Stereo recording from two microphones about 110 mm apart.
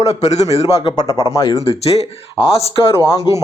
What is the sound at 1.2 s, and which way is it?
Speech, 30° left (ahead or behind).